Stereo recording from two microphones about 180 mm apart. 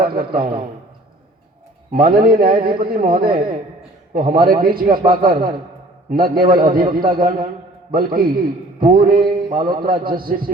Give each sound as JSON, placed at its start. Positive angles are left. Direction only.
{"t": 0.0, "sound": "a man's voice", "side_deg": -55}
{"t": 1.9, "sound": "a man's voice", "side_deg": -55}